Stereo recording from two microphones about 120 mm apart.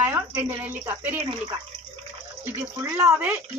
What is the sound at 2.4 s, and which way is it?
Speech, 20° right (ahead or behind).